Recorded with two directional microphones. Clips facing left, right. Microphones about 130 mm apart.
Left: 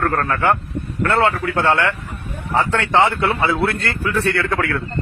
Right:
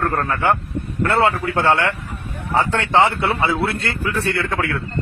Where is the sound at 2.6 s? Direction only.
25° right (ahead or behind).